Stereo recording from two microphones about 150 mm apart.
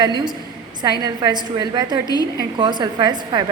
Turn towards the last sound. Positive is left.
turn(degrees=-30)  # may be behind; listen again after turning